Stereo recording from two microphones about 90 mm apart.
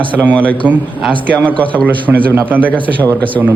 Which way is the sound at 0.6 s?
20° right (ahead or behind).